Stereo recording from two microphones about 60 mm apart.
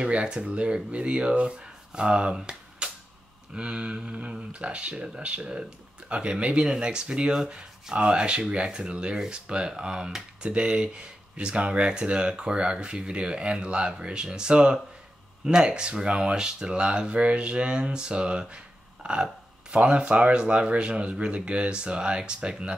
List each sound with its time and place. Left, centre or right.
0.0 s speech: centre